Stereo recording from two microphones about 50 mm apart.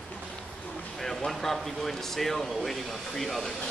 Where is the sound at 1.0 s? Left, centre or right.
Centre.